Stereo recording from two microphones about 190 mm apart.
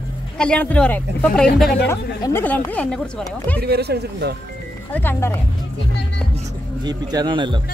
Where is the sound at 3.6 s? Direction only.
55° right (ahead or behind).